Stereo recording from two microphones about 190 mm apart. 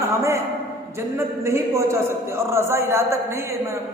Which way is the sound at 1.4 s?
15° right (ahead or behind).